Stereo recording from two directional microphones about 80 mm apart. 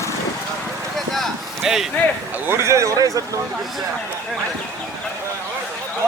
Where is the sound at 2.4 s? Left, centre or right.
Right.